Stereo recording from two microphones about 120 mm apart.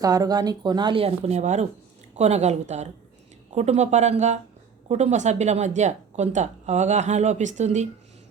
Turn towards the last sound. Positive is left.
turn(degrees=-75)  # may be behind; listen again after turning